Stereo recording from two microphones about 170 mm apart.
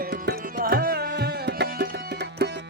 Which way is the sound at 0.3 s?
65° right (ahead or behind).